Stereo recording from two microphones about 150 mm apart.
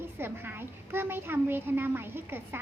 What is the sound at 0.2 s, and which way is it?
Speech, 15° right (ahead or behind).